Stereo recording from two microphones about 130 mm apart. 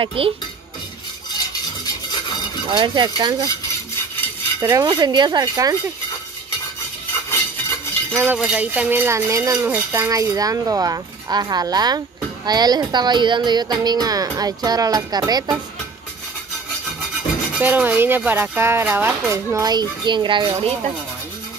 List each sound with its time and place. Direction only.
0.0 s cutlery: 45° right (ahead or behind)
2.7 s speech: 35° right (ahead or behind)
4.6 s speech: 25° right (ahead or behind)
8.1 s speech: 20° right (ahead or behind)
8.4 s speech: 10° right (ahead or behind); by 15.5 s 30° right (ahead or behind)
17.6 s speech: 15° right (ahead or behind); by 20.5 s 35° right (ahead or behind)